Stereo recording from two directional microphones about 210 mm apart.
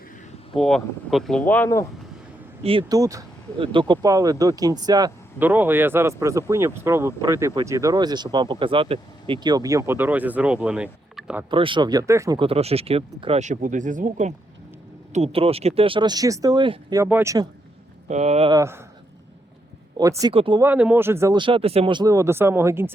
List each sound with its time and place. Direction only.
0.5 s speech: centre (ahead or behind)
2.6 s speech: 20° right (ahead or behind); by 10.8 s 5° right (ahead or behind)
11.2 s a sound: 5° right (ahead or behind)
11.5 s speech: 25° right (ahead or behind)
18.1 s speech: 30° right (ahead or behind)
18.5 s speech: 15° right (ahead or behind)
20.0 s speech: 15° right (ahead or behind)
20.6 s speech: 5° right (ahead or behind)